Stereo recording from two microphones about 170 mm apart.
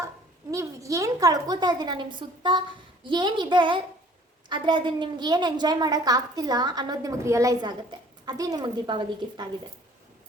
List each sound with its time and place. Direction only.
0.5 s a woman's voice: 20° right (ahead or behind)